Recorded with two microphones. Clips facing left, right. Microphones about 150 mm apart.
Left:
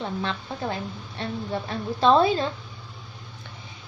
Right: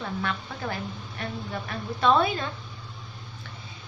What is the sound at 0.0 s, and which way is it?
A woman's voice, 25° left (ahead or behind).